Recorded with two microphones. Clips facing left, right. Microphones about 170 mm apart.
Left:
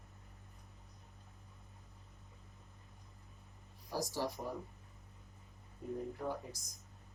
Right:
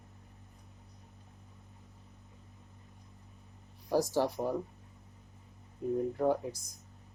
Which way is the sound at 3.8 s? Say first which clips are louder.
Right 9 dB; 65° right (ahead or behind).